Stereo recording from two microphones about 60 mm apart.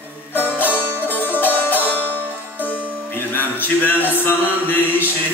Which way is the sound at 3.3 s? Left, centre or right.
Left.